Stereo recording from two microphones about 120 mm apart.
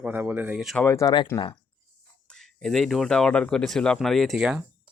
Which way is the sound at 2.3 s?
5° left (ahead or behind).